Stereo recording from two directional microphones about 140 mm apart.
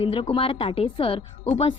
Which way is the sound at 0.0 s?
40° left (ahead or behind).